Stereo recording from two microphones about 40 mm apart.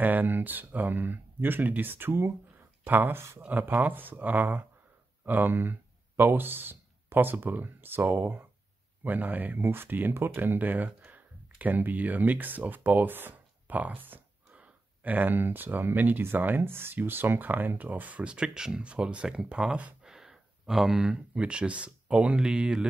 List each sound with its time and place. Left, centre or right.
0.0 s speech: right
2.9 s speech: right
9.6 s speech: right
10.4 s speech: right
14.5 s speech: right
16.6 s speech: right
16.9 s speech: right
18.2 s speech: right
18.8 s speech: right
20.1 s a sound: centre
21.4 s speech: right